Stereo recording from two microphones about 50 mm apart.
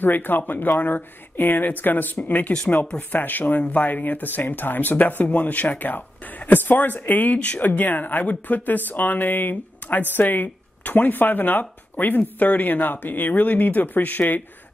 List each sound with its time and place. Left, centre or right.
0.0 s speech: left
7.3 s speech: left
7.6 s speech: left